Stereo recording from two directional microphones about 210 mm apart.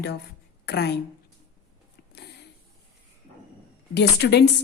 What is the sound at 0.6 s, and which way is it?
Speech, 50° left (ahead or behind).